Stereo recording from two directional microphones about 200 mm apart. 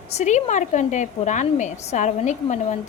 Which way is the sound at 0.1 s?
35° left (ahead or behind).